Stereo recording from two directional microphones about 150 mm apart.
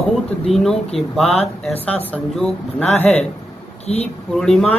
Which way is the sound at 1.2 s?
40° left (ahead or behind).